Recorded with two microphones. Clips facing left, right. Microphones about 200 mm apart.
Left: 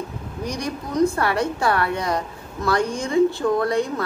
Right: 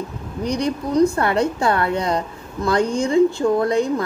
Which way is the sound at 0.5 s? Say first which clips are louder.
Right 7 dB; 60° right (ahead or behind).